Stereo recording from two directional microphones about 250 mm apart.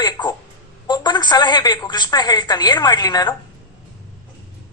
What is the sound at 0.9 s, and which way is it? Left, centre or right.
A woman's voice, centre.